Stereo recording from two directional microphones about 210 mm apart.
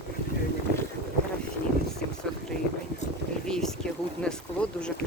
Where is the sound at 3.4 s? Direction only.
5° left (ahead or behind).